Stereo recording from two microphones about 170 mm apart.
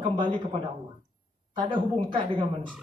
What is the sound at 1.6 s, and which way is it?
Speech, 30° right (ahead or behind).